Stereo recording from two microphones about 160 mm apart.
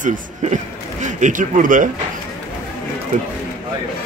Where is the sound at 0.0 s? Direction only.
50° right (ahead or behind).